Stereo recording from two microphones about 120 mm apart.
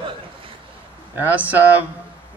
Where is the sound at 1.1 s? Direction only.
15° right (ahead or behind).